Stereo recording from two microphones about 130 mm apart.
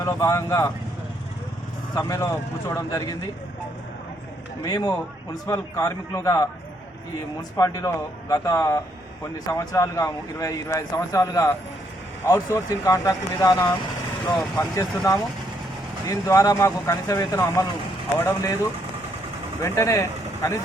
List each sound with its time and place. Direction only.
0.0 s speech: 25° left (ahead or behind)
2.0 s speech: 25° left (ahead or behind)
4.6 s speech: 30° left (ahead or behind)
7.5 s speech: 25° left (ahead or behind)
19.6 s speech: 20° left (ahead or behind)